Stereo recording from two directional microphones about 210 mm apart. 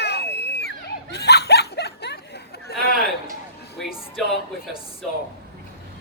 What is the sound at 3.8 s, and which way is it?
Music, centre (ahead or behind).